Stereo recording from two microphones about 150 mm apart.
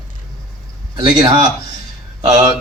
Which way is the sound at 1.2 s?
25° right (ahead or behind).